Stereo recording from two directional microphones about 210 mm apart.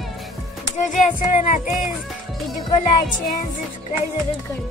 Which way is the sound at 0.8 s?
35° left (ahead or behind).